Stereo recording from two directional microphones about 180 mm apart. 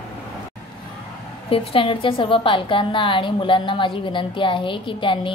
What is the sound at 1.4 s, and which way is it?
A woman's voice, 30° left (ahead or behind).